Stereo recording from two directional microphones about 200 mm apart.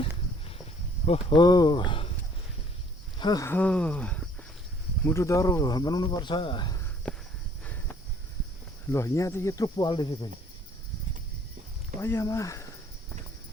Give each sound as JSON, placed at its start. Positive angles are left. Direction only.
{"t": 1.0, "sound": "speech", "side_deg": 25}
{"t": 3.2, "sound": "speech", "side_deg": 20}
{"t": 7.1, "sound": "a sound", "side_deg": 5}
{"t": 7.6, "sound": "cricket", "side_deg": 10}
{"t": 8.9, "sound": "speech", "side_deg": 15}
{"t": 11.9, "sound": "speech", "side_deg": 10}